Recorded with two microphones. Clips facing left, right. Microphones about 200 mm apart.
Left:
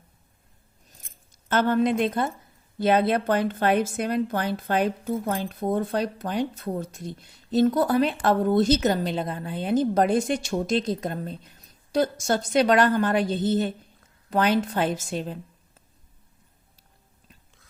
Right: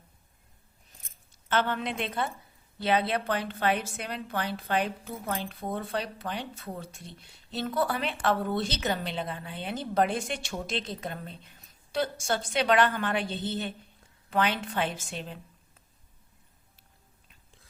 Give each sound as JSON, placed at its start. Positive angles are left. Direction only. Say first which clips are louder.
{"t": 1.3, "sound": "a woman's voice", "louder": "left 6 dB", "side_deg": 40}